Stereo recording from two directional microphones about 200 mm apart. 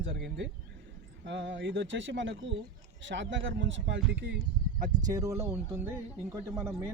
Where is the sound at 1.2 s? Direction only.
65° right (ahead or behind).